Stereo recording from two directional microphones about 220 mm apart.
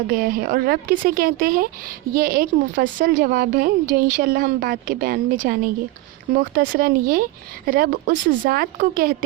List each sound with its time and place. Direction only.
0.1 s a woman's voice: 40° right (ahead or behind)